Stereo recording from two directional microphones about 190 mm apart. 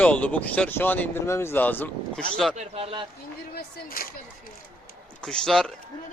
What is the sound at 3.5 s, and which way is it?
Speech, 50° left (ahead or behind).